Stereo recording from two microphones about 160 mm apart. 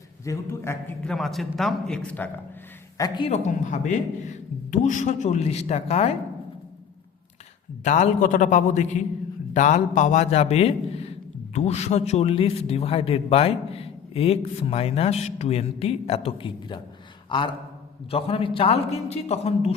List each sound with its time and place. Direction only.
0.3 s a man's voice: 15° left (ahead or behind)
3.2 s a man's voice: 45° left (ahead or behind)
7.9 s a man's voice: 50° left (ahead or behind)